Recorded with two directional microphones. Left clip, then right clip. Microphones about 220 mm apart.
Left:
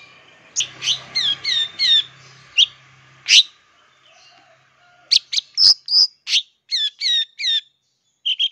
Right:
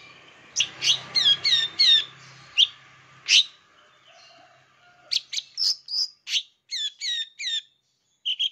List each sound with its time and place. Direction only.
0.6 s bird: centre (ahead or behind)
1.4 s alarm: 5° left (ahead or behind)
3.3 s bird: 15° left (ahead or behind)
5.0 s chirp: 25° left (ahead or behind)
8.2 s a sound: 20° left (ahead or behind)